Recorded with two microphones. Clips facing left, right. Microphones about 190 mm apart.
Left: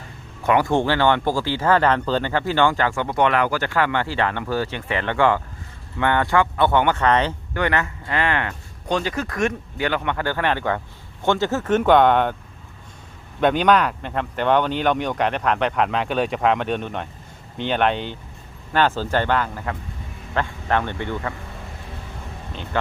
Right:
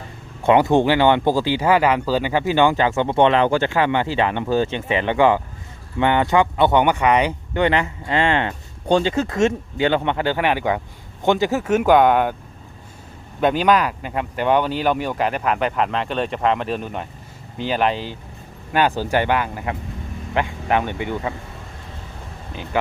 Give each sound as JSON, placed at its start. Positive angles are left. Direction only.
{"t": 0.4, "sound": "speech", "side_deg": -20}
{"t": 13.4, "sound": "speech", "side_deg": -5}
{"t": 22.7, "sound": "speech", "side_deg": -10}